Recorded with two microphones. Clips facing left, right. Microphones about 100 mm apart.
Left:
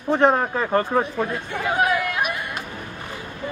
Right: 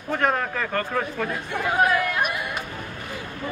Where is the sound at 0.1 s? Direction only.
25° left (ahead or behind).